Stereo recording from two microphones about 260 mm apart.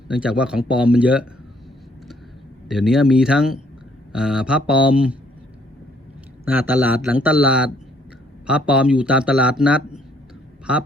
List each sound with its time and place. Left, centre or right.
0.1 s a man's voice: centre
2.6 s a man's voice: centre
6.4 s a man's voice: centre